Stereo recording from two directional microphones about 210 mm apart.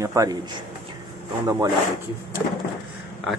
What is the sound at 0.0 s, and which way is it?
Speech, 15° right (ahead or behind).